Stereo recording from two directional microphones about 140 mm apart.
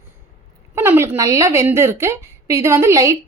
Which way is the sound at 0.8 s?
15° right (ahead or behind).